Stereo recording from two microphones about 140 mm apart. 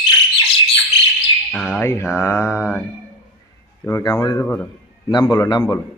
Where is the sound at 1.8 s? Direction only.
20° left (ahead or behind).